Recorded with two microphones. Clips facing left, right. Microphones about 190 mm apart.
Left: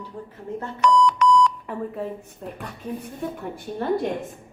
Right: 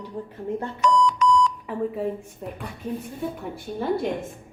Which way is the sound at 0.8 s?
65° left (ahead or behind).